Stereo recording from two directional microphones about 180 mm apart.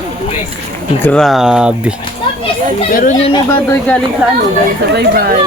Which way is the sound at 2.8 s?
45° left (ahead or behind).